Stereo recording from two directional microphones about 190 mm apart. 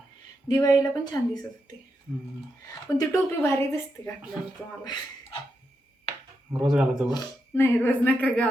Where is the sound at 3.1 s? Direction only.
15° left (ahead or behind).